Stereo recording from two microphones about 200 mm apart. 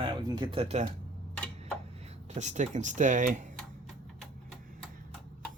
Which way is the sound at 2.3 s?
35° right (ahead or behind).